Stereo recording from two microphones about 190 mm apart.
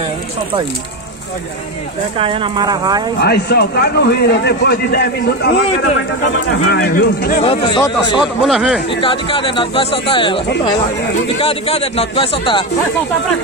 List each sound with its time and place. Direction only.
2.1 s speech: 25° right (ahead or behind)
3.2 s a man's voice: 60° left (ahead or behind)
6.6 s a man's voice: 60° left (ahead or behind)
7.4 s speech: 25° left (ahead or behind)
8.2 s speech: centre (ahead or behind)
9.0 s speech: 25° left (ahead or behind)